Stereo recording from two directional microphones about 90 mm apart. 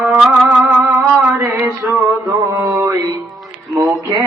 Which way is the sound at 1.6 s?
35° right (ahead or behind).